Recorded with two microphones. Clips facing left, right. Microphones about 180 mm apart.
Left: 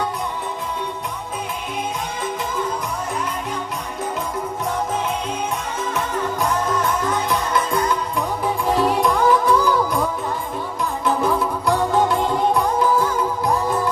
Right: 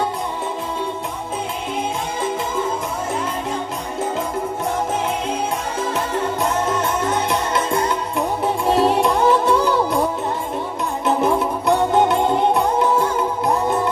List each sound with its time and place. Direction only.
5.8 s music: 30° right (ahead or behind)